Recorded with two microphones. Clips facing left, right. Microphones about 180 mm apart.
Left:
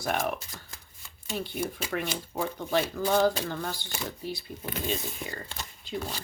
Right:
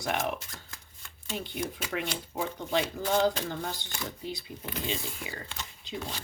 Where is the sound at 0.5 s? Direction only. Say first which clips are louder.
Left 1 dB; centre (ahead or behind).